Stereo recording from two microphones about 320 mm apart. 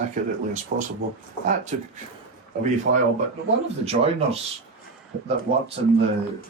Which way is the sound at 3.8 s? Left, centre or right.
Centre.